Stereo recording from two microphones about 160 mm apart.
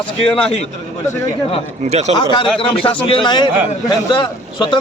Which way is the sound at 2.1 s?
30° left (ahead or behind).